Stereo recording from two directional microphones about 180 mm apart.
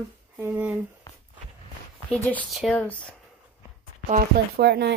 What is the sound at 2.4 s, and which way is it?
Speech, centre (ahead or behind).